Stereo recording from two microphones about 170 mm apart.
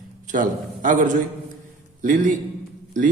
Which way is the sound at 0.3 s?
50° right (ahead or behind).